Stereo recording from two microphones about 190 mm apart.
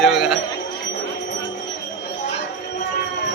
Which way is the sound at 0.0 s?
Centre (ahead or behind).